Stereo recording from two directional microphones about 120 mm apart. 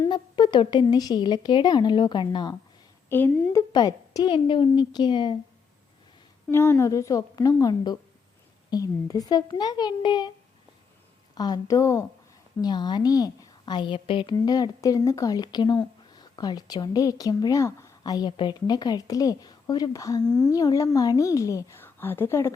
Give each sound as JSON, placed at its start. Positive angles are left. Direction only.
{"t": 0.1, "sound": "speech", "side_deg": 40}
{"t": 3.1, "sound": "a woman's voice", "side_deg": 20}
{"t": 3.7, "sound": "speech", "side_deg": 35}
{"t": 6.5, "sound": "a woman's voice", "side_deg": 20}
{"t": 11.3, "sound": "a woman's voice", "side_deg": 35}
{"t": 12.6, "sound": "a woman's voice", "side_deg": 35}